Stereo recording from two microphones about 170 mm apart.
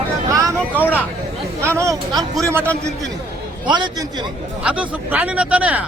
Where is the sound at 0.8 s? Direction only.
10° left (ahead or behind).